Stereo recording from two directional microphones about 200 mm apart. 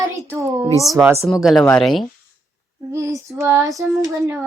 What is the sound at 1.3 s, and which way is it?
Speech, centre (ahead or behind).